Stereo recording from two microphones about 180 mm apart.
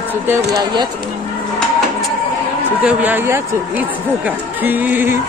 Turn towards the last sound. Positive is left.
turn(degrees=-10)  # may be behind; listen again after turning